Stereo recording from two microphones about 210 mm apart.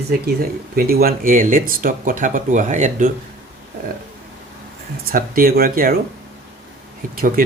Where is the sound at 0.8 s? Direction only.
45° right (ahead or behind).